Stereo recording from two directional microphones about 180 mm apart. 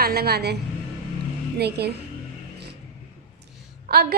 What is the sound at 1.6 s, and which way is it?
Speech, 65° right (ahead or behind).